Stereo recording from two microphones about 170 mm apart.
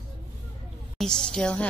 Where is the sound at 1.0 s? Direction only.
5° left (ahead or behind).